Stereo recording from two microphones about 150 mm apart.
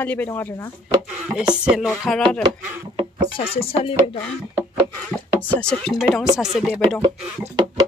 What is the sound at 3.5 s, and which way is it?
Speech, 40° left (ahead or behind).